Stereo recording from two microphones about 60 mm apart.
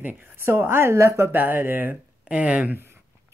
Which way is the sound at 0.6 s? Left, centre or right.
Right.